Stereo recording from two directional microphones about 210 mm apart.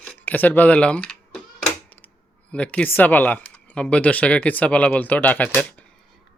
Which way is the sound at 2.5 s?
5° left (ahead or behind).